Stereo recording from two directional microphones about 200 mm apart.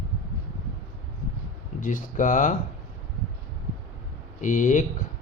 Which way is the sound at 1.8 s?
40° left (ahead or behind).